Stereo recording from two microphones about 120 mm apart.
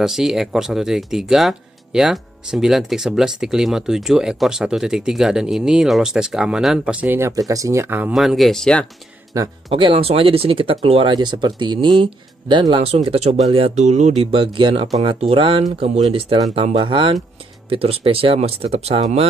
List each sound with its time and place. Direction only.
0.0 s speech: 5° right (ahead or behind)
7.2 s speech: 25° right (ahead or behind)
8.1 s speech: centre (ahead or behind)
9.3 s speech: 30° right (ahead or behind)
9.7 s speech: 45° right (ahead or behind)
13.7 s speech: 75° right (ahead or behind); by 19.2 s 60° right (ahead or behind)